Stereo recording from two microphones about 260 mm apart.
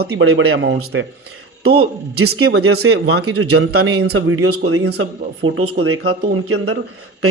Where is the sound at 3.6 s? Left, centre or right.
Right.